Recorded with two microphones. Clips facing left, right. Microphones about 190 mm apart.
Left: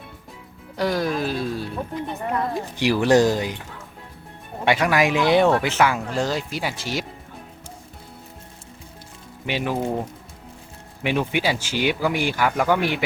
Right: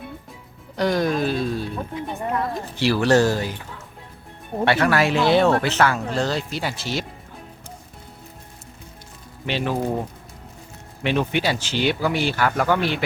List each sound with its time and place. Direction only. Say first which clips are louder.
0.8 s speech: right 2 dB; 5° left (ahead or behind)
2.6 s speech: left 1 dB; 15° left (ahead or behind)
4.6 s speech: right 1 dB; 15° left (ahead or behind)
9.5 s speech: right 1 dB; 10° left (ahead or behind)
11.0 s speech: right 1 dB; 10° left (ahead or behind)